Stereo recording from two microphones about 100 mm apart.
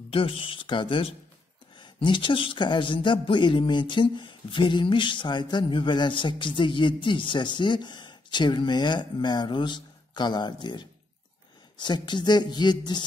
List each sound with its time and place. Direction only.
0.1 s speech: 65° left (ahead or behind); by 13.0 s 45° left (ahead or behind)